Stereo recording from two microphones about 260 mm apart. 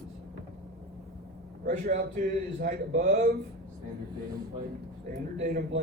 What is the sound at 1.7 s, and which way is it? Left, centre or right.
A man's voice, right.